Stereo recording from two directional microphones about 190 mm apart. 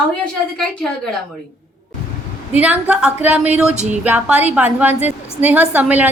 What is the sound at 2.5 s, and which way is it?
A woman's voice, 5° right (ahead or behind).